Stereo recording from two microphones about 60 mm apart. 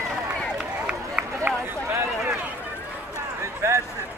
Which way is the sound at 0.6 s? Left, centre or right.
Centre.